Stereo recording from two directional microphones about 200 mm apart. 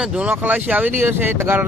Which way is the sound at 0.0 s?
5° right (ahead or behind).